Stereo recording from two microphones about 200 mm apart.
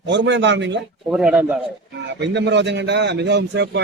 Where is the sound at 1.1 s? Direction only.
5° right (ahead or behind).